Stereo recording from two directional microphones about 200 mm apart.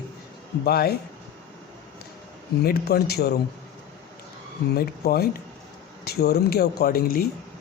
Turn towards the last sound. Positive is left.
turn(degrees=50)  # may be behind; listen again after turning